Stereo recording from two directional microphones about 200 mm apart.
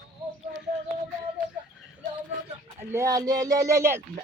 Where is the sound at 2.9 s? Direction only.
15° right (ahead or behind).